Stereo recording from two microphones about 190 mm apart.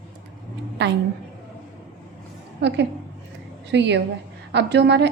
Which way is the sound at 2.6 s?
65° right (ahead or behind).